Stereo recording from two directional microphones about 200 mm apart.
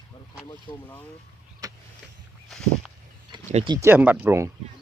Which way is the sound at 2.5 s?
Centre (ahead or behind).